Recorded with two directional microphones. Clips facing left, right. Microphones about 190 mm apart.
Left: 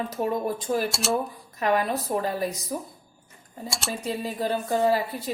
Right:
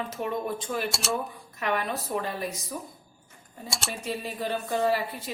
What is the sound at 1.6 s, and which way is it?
Speech, 40° left (ahead or behind).